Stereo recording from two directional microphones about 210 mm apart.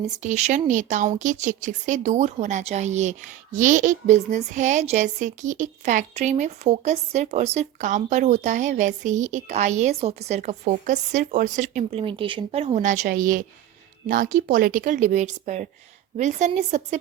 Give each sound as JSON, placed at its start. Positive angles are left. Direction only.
{"t": 0.0, "sound": "speech", "side_deg": -35}
{"t": 11.9, "sound": "speech", "side_deg": -25}